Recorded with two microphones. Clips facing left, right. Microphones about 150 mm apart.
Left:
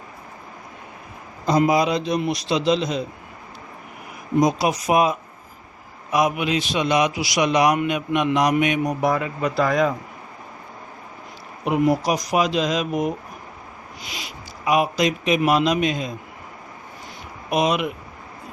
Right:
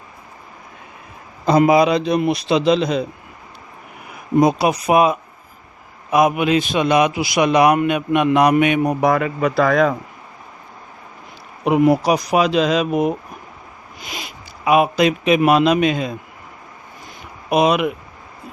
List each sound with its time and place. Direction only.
1.5 s a man's voice: 65° right (ahead or behind)
4.4 s a man's voice: 60° right (ahead or behind)
11.6 s speech: 75° right (ahead or behind)
14.0 s a man's voice: 50° right (ahead or behind); by 16.1 s 65° right (ahead or behind)
17.5 s speech: 65° right (ahead or behind)